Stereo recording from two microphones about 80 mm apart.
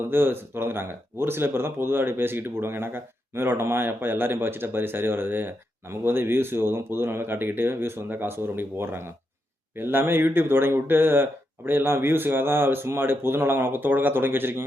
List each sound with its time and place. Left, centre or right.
0.1 s speech: right